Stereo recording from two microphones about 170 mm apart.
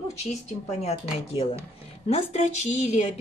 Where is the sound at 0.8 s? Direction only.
35° left (ahead or behind).